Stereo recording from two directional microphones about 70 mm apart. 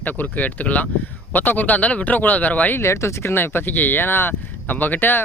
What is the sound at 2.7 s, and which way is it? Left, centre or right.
Speech, left.